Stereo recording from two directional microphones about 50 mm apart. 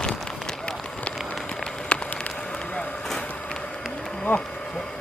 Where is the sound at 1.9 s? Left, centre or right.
Left.